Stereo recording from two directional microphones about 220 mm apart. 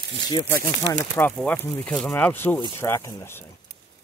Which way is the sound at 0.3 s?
20° left (ahead or behind).